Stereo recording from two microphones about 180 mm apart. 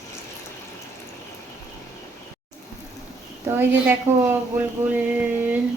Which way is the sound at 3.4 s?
10° right (ahead or behind).